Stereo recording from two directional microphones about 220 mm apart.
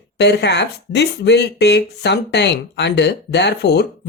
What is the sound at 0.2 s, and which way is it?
Speech, 50° left (ahead or behind).